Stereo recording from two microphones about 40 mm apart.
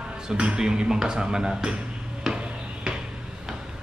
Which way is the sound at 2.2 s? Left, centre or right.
Right.